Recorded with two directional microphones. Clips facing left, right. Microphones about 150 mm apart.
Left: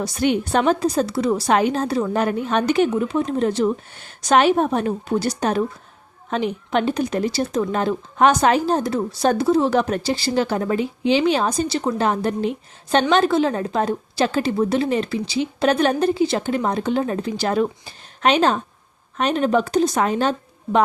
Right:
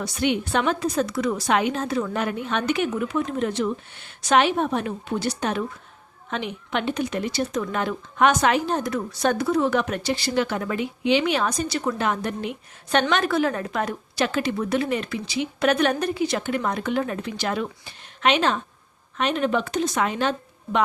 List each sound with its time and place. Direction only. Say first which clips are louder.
0.0 s speech: left 4 dB; 40° left (ahead or behind)